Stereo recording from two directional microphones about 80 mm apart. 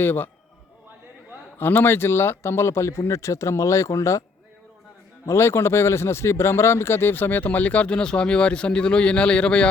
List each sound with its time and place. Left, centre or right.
0.0 s speech: left
1.5 s speech: left
5.2 s speech: left; by 9.6 s centre